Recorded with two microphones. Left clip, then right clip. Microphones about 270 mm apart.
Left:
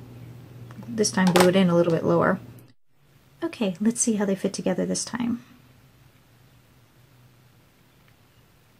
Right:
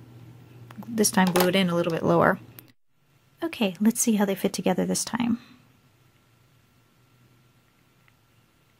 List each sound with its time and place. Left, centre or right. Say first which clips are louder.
0.7 s speech: even; right
3.3 s speech: even; right